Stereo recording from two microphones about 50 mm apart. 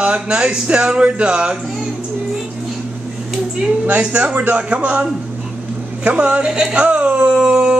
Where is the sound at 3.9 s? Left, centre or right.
Right.